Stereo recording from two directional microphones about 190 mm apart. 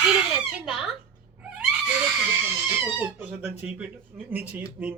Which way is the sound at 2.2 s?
10° right (ahead or behind).